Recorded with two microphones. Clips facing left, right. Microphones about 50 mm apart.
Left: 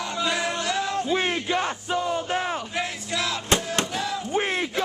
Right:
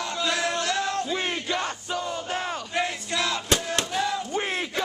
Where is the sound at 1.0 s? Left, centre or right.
Centre.